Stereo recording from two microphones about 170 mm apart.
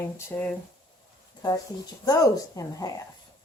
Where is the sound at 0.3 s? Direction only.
10° left (ahead or behind).